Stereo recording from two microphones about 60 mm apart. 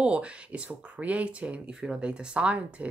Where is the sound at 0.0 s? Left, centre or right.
Centre.